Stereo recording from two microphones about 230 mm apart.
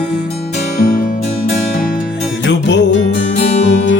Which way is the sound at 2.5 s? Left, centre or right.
Left.